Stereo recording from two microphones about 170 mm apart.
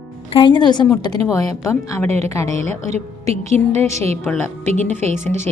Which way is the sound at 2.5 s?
40° right (ahead or behind).